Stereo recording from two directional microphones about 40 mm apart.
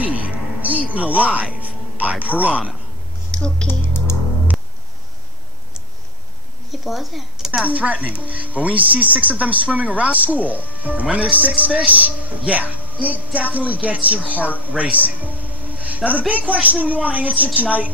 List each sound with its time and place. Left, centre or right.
0.0 s music: right
2.3 s speech: right
3.6 s a sound: left
6.7 s speech: centre
7.6 s speech: right